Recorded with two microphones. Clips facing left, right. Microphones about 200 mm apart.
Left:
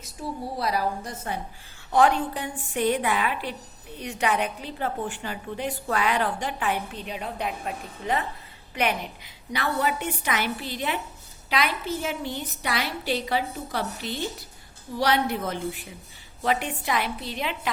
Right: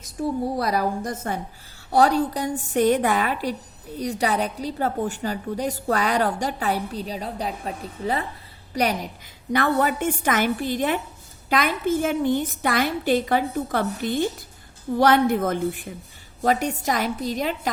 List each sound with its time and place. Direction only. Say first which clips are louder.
0.6 s a woman's voice: right 3 dB; 45° right (ahead or behind)